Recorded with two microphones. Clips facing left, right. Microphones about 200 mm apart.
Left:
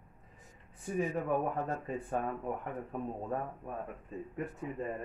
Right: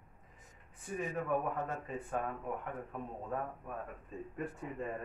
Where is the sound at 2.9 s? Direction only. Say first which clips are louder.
Left 5 dB; 35° left (ahead or behind).